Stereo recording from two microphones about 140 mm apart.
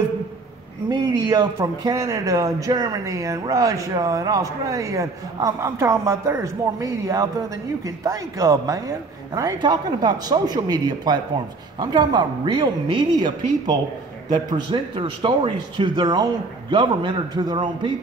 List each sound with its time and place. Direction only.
0.8 s a man's voice: 25° right (ahead or behind)